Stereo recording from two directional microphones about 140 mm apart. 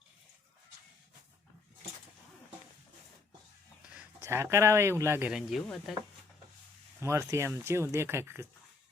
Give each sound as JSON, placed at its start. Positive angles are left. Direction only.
{"t": 4.2, "sound": "speech", "side_deg": -20}
{"t": 5.3, "sound": "speech", "side_deg": 0}
{"t": 7.0, "sound": "speech", "side_deg": -20}